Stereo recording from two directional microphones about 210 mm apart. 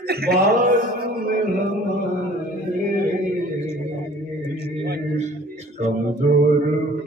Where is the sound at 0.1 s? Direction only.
50° right (ahead or behind).